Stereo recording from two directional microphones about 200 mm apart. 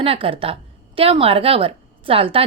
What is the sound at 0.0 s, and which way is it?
A woman's voice, 25° right (ahead or behind).